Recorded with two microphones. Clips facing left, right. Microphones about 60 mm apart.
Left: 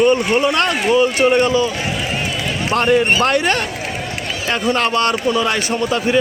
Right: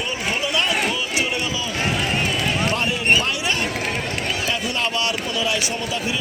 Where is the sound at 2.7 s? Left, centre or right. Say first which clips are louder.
Left 10 dB; left.